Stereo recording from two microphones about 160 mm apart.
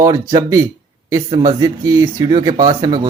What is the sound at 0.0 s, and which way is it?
Speech, 25° right (ahead or behind).